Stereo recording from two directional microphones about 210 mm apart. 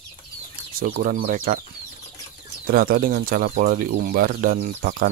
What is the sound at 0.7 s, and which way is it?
Speech, 45° right (ahead or behind).